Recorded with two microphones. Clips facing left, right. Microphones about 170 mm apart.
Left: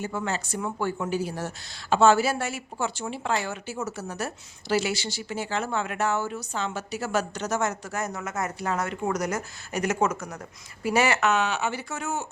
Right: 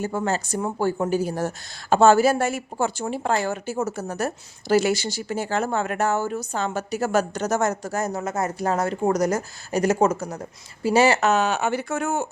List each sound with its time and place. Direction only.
0.0 s speech: 40° right (ahead or behind)